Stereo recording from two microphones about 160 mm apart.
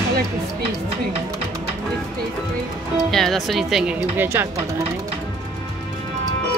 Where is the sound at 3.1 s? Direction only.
Centre (ahead or behind).